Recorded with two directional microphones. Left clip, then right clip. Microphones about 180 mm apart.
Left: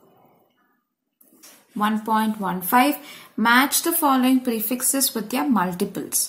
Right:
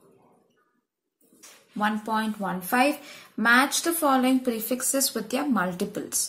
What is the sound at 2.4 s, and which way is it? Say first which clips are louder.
Speech: left 3 dB; 15° left (ahead or behind).